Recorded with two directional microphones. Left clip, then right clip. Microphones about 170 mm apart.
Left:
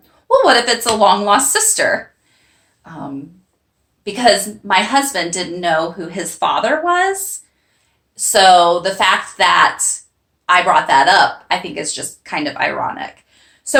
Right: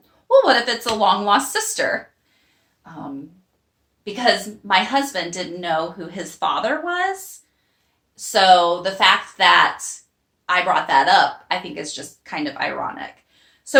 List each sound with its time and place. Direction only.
0.3 s speech: 15° left (ahead or behind)
4.0 s a woman's voice: 20° left (ahead or behind)